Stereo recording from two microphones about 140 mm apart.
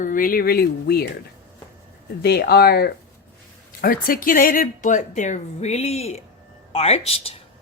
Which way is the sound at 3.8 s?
90° left.